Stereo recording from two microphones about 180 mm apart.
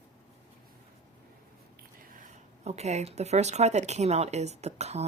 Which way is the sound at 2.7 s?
40° right (ahead or behind).